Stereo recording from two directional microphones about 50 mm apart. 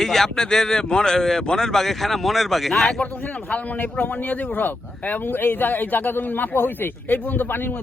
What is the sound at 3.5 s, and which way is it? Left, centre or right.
Speech, left.